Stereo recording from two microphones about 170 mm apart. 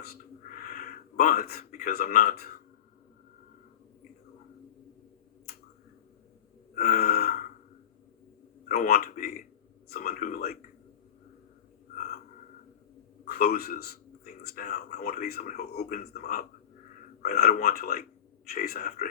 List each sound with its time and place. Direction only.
0.5 s a sound: 50° left (ahead or behind)
2.2 s speech: 65° left (ahead or behind)
6.7 s gasp: 60° left (ahead or behind)
8.6 s speech: 55° left (ahead or behind)
13.2 s a man's voice: 65° left (ahead or behind)
14.6 s speech: 45° left (ahead or behind)
14.9 s speech: 65° left (ahead or behind)